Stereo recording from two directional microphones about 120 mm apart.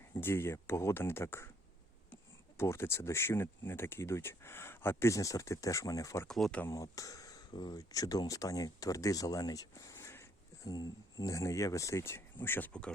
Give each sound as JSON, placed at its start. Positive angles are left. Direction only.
{"t": 0.1, "sound": "speech", "side_deg": 20}
{"t": 2.6, "sound": "speech", "side_deg": 20}
{"t": 6.2, "sound": "speech", "side_deg": 5}
{"t": 6.7, "sound": "speech", "side_deg": 25}